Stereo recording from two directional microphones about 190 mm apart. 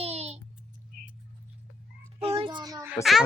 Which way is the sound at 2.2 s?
30° right (ahead or behind).